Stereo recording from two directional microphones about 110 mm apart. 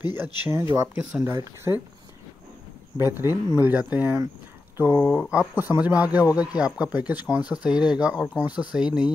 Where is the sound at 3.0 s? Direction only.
20° right (ahead or behind).